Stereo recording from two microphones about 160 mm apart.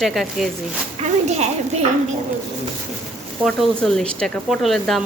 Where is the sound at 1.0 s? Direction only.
45° right (ahead or behind).